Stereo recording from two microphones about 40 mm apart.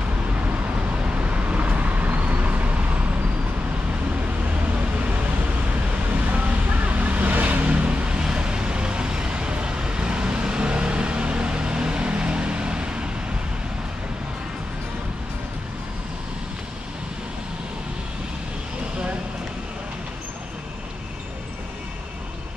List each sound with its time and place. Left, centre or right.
0.5 s vehicle: right
4.6 s vehicle: right